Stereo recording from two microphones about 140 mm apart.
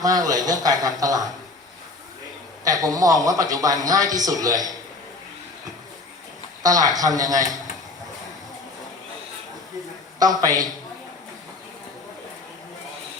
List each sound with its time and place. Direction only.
0.0 s a man's voice: 25° right (ahead or behind)
2.6 s a man's voice: 25° right (ahead or behind)
6.6 s a man's voice: 25° right (ahead or behind)
10.2 s a man's voice: 25° right (ahead or behind)